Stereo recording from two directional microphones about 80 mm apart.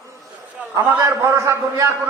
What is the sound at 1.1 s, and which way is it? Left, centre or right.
Speech, right.